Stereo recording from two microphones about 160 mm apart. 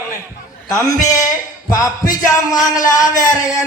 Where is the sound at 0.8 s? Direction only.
20° left (ahead or behind).